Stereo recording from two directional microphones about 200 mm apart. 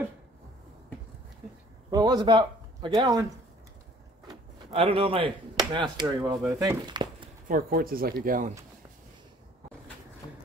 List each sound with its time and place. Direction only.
1.9 s speech: 20° right (ahead or behind)
4.3 s speech: 30° right (ahead or behind)
6.6 s a sound: 20° right (ahead or behind)
7.4 s speech: 45° right (ahead or behind)